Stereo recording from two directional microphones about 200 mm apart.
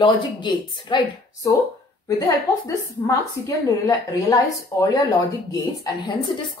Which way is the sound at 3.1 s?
15° left (ahead or behind).